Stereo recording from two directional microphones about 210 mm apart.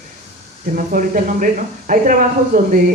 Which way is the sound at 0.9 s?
40° right (ahead or behind).